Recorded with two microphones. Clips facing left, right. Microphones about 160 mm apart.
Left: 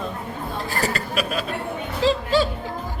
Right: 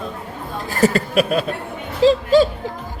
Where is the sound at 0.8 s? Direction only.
45° right (ahead or behind).